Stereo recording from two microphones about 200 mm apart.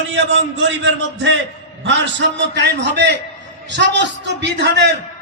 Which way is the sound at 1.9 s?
65° right (ahead or behind).